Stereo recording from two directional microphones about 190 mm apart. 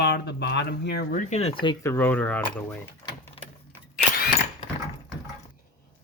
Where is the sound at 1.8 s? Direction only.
10° left (ahead or behind).